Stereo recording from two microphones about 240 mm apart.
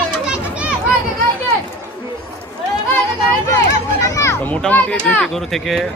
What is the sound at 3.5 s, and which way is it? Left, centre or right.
A child's voice, centre.